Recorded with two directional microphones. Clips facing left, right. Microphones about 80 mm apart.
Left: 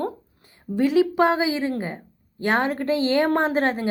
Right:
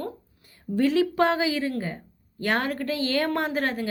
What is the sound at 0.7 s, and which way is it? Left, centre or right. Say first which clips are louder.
A woman's voice: left 3 dB; centre.